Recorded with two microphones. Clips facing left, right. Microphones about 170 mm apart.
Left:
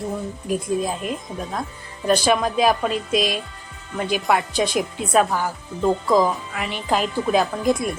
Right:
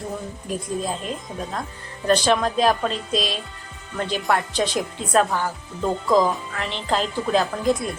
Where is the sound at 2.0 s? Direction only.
10° left (ahead or behind).